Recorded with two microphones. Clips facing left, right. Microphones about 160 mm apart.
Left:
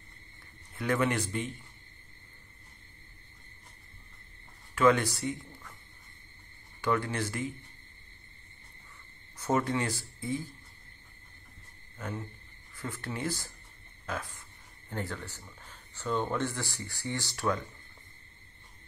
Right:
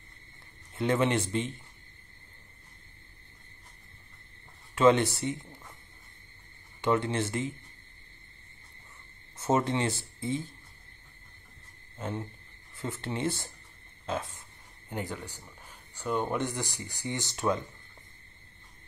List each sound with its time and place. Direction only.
0.7 s speech: 25° right (ahead or behind)
4.7 s speech: 25° right (ahead or behind)
6.8 s speech: 25° right (ahead or behind)
9.4 s speech: 25° right (ahead or behind)
12.0 s speech: 25° right (ahead or behind)